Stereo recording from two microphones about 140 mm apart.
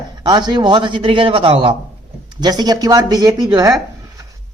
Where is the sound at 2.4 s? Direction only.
30° right (ahead or behind).